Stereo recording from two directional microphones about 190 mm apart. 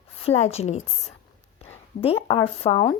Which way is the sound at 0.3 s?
35° left (ahead or behind).